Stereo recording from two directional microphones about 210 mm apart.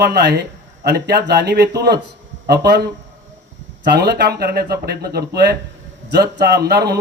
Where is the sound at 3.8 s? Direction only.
50° right (ahead or behind).